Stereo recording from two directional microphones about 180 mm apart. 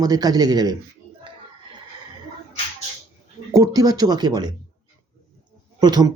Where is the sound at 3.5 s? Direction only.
20° right (ahead or behind).